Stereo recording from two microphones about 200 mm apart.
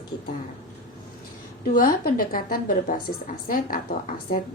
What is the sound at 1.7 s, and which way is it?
A woman's voice, 45° left (ahead or behind).